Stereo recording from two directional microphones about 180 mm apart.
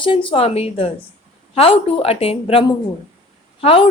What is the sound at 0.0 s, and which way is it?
Speech, 30° left (ahead or behind).